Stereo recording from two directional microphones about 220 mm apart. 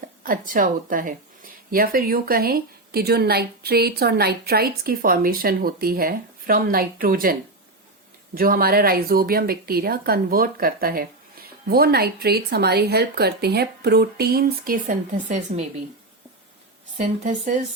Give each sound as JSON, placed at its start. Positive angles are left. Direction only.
{"t": 0.2, "sound": "a woman's voice", "side_deg": -40}
{"t": 8.4, "sound": "a woman's voice", "side_deg": -40}
{"t": 17.0, "sound": "a woman's voice", "side_deg": -35}